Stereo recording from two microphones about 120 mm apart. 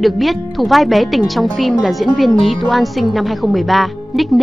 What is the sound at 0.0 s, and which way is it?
A woman's voice, centre (ahead or behind).